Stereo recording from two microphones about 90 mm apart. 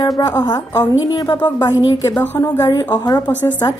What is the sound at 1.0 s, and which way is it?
Speech, 50° left (ahead or behind).